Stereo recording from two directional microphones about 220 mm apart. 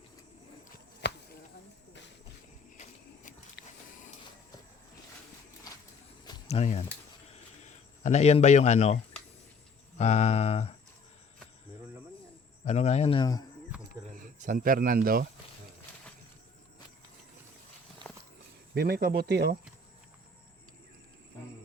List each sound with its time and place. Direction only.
1.0 s chop: 50° left (ahead or behind)
3.6 s vehicle: 50° left (ahead or behind)
6.2 s a sound: 30° left (ahead or behind)
8.0 s a man's voice: 30° left (ahead or behind)
10.0 s speech: 30° left (ahead or behind)
12.6 s speech: 30° left (ahead or behind)
14.4 s speech: 40° right (ahead or behind)
18.0 s walk: 20° right (ahead or behind)
18.7 s speech: 45° right (ahead or behind)